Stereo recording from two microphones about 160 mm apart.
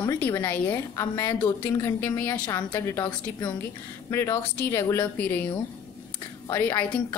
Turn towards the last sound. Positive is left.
turn(degrees=10)  # may be behind; listen again after turning